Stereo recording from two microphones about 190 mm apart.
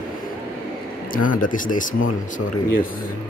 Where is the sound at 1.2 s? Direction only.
45° left (ahead or behind).